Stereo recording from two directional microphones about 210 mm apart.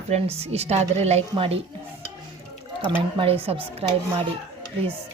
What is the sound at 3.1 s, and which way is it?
Speech, 25° right (ahead or behind).